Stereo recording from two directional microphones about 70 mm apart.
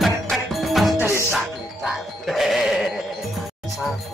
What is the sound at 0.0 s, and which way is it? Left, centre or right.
Music, centre.